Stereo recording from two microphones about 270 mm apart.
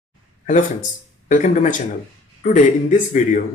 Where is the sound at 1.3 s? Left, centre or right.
Left.